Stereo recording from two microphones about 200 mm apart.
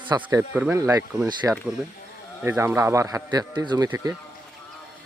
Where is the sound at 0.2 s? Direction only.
10° right (ahead or behind).